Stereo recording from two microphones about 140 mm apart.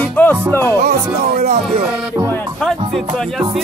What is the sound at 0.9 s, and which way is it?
Speech, 85° right.